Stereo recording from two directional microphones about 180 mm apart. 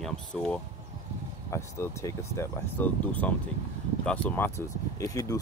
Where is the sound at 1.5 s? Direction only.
15° left (ahead or behind).